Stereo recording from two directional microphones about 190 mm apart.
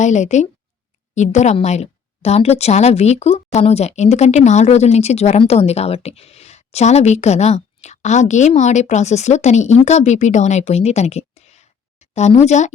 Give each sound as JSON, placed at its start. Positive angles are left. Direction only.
{"t": 0.0, "sound": "a woman's voice", "side_deg": 40}